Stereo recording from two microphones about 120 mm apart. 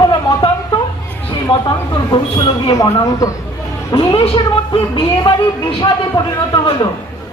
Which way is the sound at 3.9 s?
45° left (ahead or behind).